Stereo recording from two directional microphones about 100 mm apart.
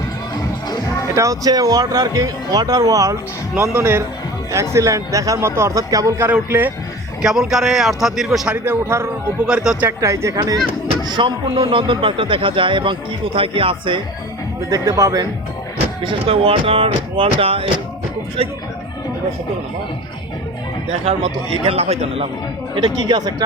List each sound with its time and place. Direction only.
1.1 s speech: 30° right (ahead or behind)
3.5 s speech: 25° right (ahead or behind)
6.1 s speech: 20° right (ahead or behind)
7.2 s speech: 5° right (ahead or behind)
8.5 s speech: 25° right (ahead or behind)
9.5 s speech: 10° right (ahead or behind)
10.0 s speech: 30° right (ahead or behind)
11.1 s speech: 50° right (ahead or behind)
14.7 s speech: 35° right (ahead or behind)
16.0 s speech: 70° right (ahead or behind)
21.0 s speech: 80° right
22.7 s speech: 50° right (ahead or behind)